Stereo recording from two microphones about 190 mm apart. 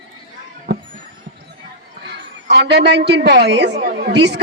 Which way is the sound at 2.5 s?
60° right (ahead or behind).